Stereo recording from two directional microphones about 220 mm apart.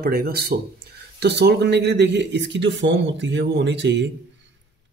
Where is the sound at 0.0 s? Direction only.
45° right (ahead or behind).